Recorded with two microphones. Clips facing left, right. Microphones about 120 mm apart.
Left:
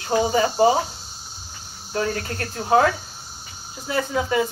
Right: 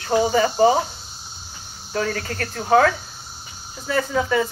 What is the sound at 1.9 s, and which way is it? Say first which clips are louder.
Speech: even; 20° left (ahead or behind).